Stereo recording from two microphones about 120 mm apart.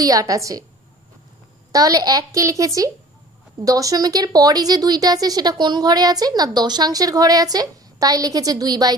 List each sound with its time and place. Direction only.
0.0 s a woman's voice: 30° right (ahead or behind)
1.7 s a woman's voice: 30° right (ahead or behind)